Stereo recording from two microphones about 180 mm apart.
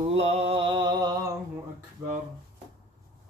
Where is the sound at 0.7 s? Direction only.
25° right (ahead or behind).